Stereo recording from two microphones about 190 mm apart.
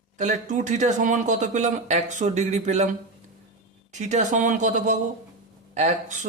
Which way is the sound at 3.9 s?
40° right (ahead or behind).